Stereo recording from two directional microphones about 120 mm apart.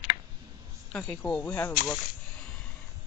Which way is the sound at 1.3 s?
10° left (ahead or behind).